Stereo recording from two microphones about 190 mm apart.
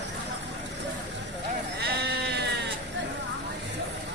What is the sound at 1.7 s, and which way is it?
Sheep, 60° right (ahead or behind).